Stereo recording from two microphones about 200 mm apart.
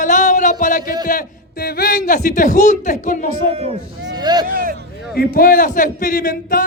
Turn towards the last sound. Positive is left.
turn(degrees=45)  # may be behind; listen again after turning